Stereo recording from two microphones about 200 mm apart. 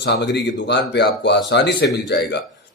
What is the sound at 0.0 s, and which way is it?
Speech, 60° left (ahead or behind).